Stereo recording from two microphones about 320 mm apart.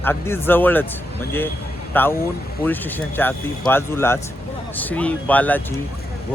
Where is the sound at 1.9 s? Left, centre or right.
Centre.